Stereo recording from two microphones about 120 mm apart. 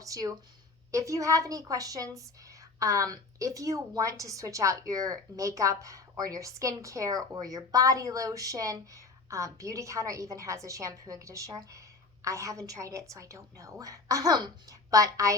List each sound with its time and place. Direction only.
0.0 s speech: 30° right (ahead or behind)